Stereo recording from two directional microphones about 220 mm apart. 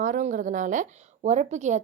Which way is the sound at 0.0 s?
35° right (ahead or behind).